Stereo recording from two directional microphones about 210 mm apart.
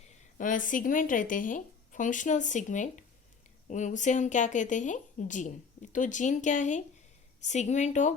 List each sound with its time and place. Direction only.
0.3 s speech: 40° left (ahead or behind)